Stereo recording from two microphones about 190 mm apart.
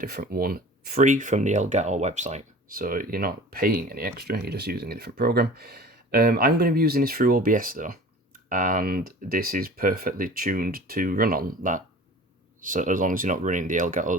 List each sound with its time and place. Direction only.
0.0 s speech: 55° right (ahead or behind)